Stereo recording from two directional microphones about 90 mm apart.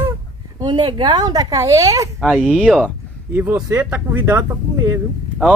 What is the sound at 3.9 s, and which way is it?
Speech, 20° right (ahead or behind).